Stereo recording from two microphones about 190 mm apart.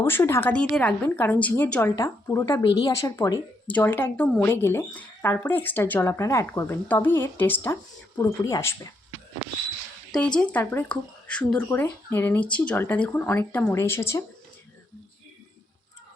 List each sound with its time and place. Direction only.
0.0 s speech: 15° left (ahead or behind)
10.3 s speech: 5° left (ahead or behind)